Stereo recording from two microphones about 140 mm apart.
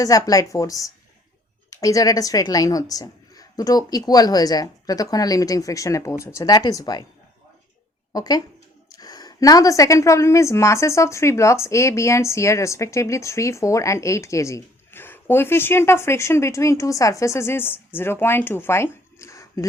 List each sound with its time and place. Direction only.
0.0 s a woman's voice: 25° left (ahead or behind)
8.1 s a woman's voice: 25° left (ahead or behind)